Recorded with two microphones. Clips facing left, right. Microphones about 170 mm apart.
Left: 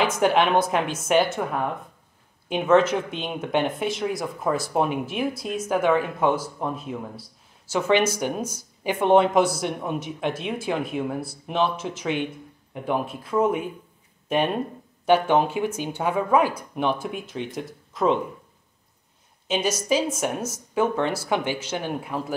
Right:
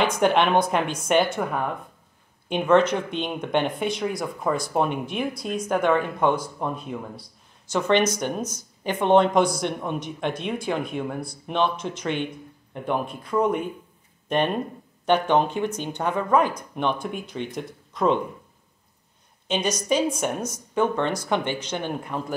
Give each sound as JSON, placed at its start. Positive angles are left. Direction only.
{"t": 0.0, "sound": "speech", "side_deg": 0}
{"t": 19.4, "sound": "speech", "side_deg": 5}